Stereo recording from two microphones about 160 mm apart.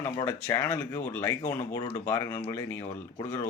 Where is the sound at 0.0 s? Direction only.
15° left (ahead or behind).